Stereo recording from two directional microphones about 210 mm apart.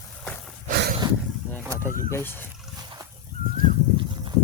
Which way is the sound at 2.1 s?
10° left (ahead or behind).